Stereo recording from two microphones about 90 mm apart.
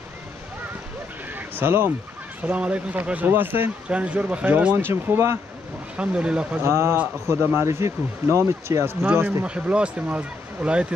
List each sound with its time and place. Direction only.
1.3 s a sound: 25° right (ahead or behind)
2.4 s speech: 15° right (ahead or behind); by 5.4 s 30° right (ahead or behind)
5.9 s speech: 10° right (ahead or behind)
6.6 s speech: 30° right (ahead or behind)
9.4 s speech: 10° right (ahead or behind)